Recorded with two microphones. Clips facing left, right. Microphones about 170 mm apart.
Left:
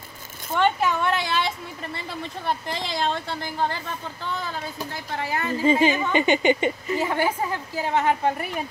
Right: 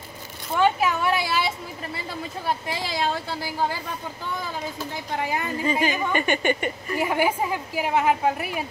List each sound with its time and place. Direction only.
0.6 s a woman's voice: 5° right (ahead or behind)
5.6 s a woman's voice: 25° left (ahead or behind)
7.0 s a woman's voice: 10° right (ahead or behind)